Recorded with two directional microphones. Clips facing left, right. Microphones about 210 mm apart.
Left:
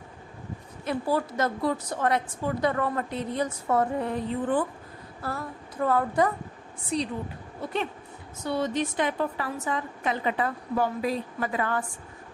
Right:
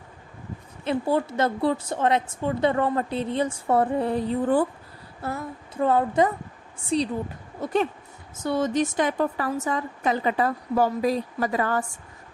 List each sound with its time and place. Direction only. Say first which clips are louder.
0.9 s a woman's voice: right 3 dB; 25° right (ahead or behind)
5.2 s a woman's voice: right 3 dB; 20° right (ahead or behind)
7.6 s a woman's voice: right 6 dB; 45° right (ahead or behind)